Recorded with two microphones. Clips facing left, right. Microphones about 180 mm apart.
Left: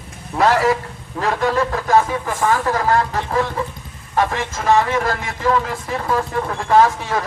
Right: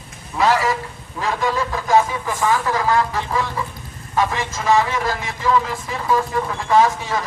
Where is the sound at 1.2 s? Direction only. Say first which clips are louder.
Left 3 dB; 55° left (ahead or behind).